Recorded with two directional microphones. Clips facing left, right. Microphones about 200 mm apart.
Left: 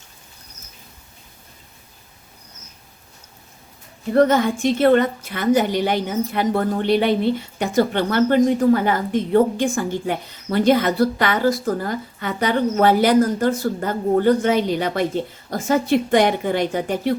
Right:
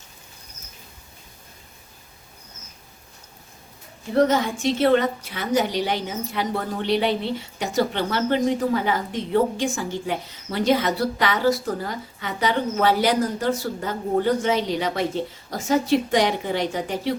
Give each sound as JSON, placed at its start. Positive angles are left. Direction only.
{"t": 4.1, "sound": "a woman's voice", "side_deg": 55}